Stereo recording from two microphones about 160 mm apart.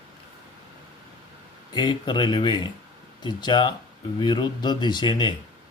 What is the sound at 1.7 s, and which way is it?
Speech, 30° left (ahead or behind).